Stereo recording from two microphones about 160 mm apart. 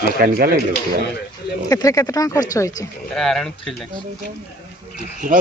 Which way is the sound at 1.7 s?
20° left (ahead or behind).